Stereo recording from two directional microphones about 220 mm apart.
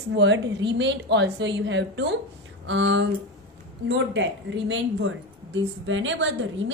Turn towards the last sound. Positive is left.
turn(degrees=-55)  # may be behind; listen again after turning